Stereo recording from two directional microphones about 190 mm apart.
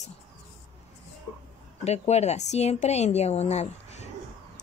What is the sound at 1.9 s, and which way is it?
A woman's voice, 35° left (ahead or behind).